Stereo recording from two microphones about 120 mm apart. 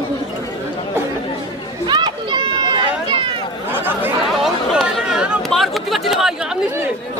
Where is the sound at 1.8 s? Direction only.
40° right (ahead or behind).